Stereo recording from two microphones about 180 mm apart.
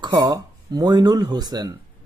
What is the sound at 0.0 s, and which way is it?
Speech, 20° right (ahead or behind).